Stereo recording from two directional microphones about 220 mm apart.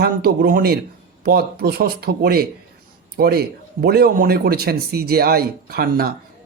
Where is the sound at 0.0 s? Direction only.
45° right (ahead or behind).